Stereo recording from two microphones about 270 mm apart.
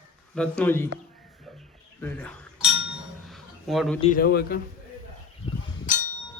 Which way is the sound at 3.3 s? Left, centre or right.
Centre.